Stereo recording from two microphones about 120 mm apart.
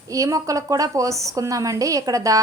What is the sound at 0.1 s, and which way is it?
A woman's voice, 30° right (ahead or behind).